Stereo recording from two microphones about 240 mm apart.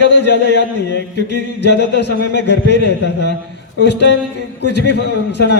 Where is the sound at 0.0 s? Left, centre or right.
Left.